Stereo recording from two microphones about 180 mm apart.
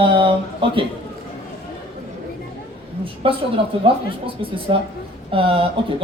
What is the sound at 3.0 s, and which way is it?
Speech, 30° right (ahead or behind).